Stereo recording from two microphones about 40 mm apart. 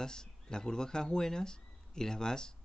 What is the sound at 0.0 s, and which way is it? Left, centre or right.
Speech, centre.